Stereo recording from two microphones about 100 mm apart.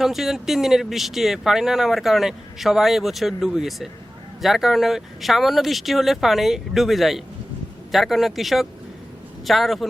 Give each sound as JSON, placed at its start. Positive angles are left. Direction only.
{"t": 0.0, "sound": "speech", "side_deg": 0}